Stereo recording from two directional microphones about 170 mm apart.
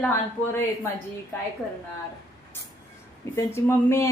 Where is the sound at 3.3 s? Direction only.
15° left (ahead or behind).